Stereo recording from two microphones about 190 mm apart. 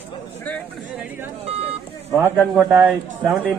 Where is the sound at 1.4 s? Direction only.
30° right (ahead or behind).